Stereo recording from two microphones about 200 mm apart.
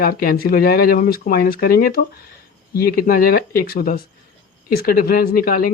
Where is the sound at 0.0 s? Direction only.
45° left (ahead or behind).